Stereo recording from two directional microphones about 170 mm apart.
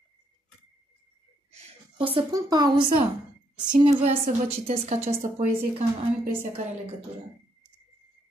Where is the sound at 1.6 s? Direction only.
30° right (ahead or behind).